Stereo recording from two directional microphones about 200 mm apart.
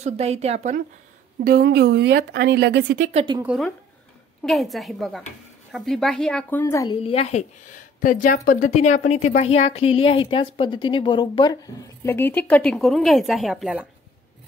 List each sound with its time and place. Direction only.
0.0 s speech: 30° right (ahead or behind)
1.4 s speech: 50° right (ahead or behind)
3.0 s speech: 35° right (ahead or behind)
3.4 s speech: centre (ahead or behind)
6.6 s a woman's voice: 15° left (ahead or behind)
7.0 s speech: 30° left (ahead or behind); by 13.8 s 5° right (ahead or behind)